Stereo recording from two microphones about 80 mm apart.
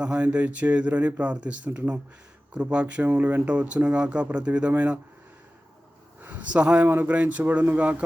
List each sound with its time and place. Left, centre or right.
0.0 s speech: centre
6.2 s a sound: centre
6.8 s a man's voice: right